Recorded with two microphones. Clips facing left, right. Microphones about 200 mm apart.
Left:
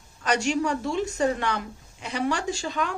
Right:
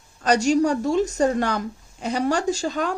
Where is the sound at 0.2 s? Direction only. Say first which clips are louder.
Right 6 dB; 40° right (ahead or behind).